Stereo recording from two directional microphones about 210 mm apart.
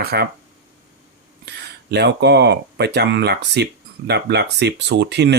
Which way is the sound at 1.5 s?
55° right (ahead or behind).